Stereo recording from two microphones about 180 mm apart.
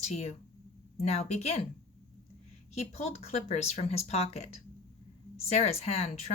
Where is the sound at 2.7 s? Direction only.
35° left (ahead or behind).